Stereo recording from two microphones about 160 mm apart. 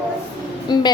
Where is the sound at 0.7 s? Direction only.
25° left (ahead or behind).